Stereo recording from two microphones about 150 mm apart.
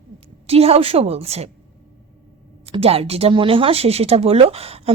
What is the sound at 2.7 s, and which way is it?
Speech, 40° right (ahead or behind).